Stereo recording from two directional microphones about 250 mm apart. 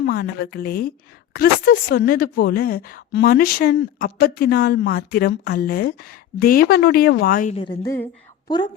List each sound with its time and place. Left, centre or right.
0.0 s a woman's voice: left; by 8.7 s centre